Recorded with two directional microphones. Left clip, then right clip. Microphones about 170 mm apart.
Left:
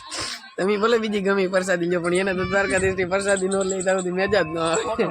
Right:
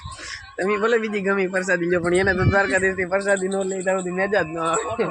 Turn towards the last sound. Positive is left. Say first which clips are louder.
# even
turn(degrees=5)  # may be behind; listen again after turning